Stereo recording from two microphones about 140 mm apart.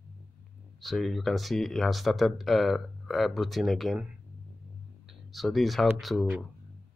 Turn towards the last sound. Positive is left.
turn(degrees=0)  # may be behind; listen again after turning